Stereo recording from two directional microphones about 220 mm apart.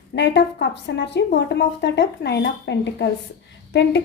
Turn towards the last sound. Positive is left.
turn(degrees=50)  # may be behind; listen again after turning